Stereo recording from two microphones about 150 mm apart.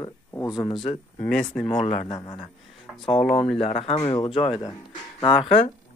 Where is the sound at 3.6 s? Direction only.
40° left (ahead or behind).